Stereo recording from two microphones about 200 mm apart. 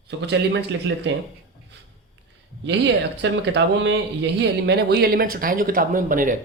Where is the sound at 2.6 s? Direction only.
60° right (ahead or behind).